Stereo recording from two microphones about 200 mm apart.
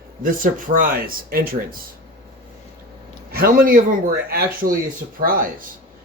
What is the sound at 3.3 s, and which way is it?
Speech, 45° right (ahead or behind).